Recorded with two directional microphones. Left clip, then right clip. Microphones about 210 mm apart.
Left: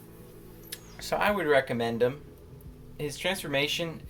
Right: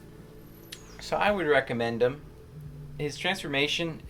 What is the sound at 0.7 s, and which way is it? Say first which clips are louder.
Speech: even; centre (ahead or behind).